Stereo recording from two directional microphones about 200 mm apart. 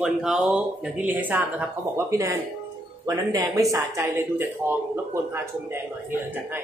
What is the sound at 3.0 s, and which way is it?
Speech, 15° right (ahead or behind).